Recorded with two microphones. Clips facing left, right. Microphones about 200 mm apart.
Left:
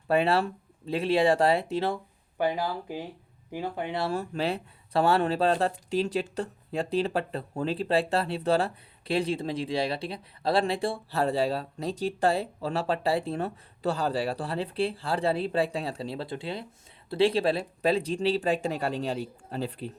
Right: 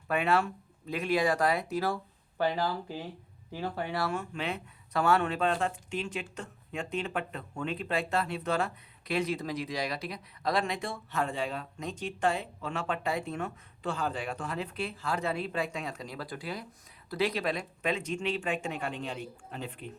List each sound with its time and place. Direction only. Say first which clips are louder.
0.1 s speech: left 4 dB; 30° left (ahead or behind)
2.4 s speech: left 2 dB; 15° left (ahead or behind)
4.1 s speech: left 5 dB; 35° left (ahead or behind)